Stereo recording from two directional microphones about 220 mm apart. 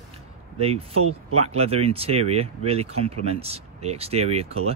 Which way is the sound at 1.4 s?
30° right (ahead or behind).